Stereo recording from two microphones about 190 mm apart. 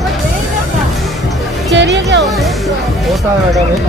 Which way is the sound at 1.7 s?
70° right (ahead or behind).